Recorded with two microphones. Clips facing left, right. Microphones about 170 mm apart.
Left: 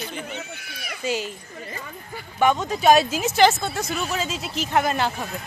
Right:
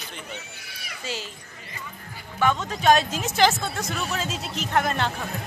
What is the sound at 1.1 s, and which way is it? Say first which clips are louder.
Speech: left 8 dB; 15° left (ahead or behind).